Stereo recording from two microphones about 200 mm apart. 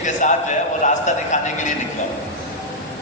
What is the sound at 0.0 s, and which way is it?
Speech, 40° left (ahead or behind).